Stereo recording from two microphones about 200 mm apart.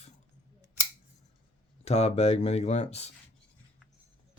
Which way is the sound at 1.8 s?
30° left (ahead or behind).